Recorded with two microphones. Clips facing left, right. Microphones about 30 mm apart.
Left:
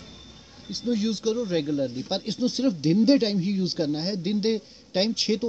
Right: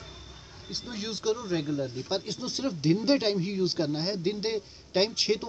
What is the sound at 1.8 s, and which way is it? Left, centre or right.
Speech, left.